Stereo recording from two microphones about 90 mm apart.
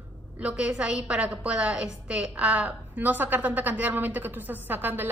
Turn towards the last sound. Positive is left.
turn(degrees=-20)  # may be behind; listen again after turning